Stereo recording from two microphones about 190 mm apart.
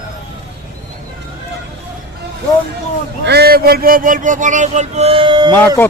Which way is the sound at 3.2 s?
55° right (ahead or behind).